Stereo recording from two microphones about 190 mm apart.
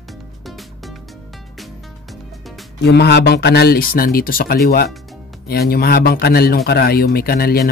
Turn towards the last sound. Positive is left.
turn(degrees=55)  # may be behind; listen again after turning